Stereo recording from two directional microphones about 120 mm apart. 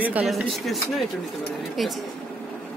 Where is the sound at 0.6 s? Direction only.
Centre (ahead or behind).